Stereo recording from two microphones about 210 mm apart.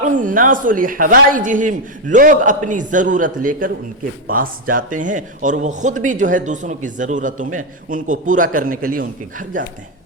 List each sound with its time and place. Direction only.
0.0 s speech: 40° right (ahead or behind)